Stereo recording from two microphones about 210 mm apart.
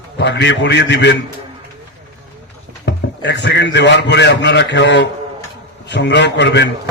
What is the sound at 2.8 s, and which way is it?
A man's voice, 55° left (ahead or behind).